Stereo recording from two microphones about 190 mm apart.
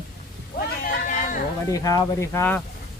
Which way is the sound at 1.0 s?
45° left (ahead or behind).